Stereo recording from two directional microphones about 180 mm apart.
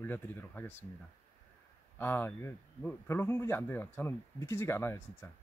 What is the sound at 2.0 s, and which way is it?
A man's voice, 10° left (ahead or behind).